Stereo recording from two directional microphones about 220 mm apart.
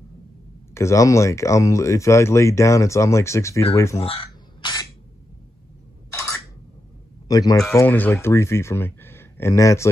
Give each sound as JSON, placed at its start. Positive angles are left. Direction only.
{"t": 0.7, "sound": "speech", "side_deg": 15}
{"t": 4.0, "sound": "crow", "side_deg": 25}
{"t": 7.2, "sound": "speech", "side_deg": 15}